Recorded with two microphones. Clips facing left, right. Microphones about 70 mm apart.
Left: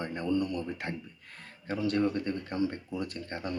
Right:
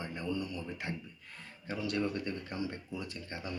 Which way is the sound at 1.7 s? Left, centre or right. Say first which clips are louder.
Left 6 dB; left.